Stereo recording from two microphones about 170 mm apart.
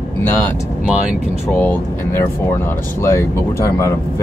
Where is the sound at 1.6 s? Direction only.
10° left (ahead or behind).